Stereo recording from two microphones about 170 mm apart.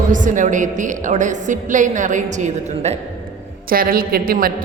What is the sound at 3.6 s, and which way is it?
Speech, 60° right (ahead or behind).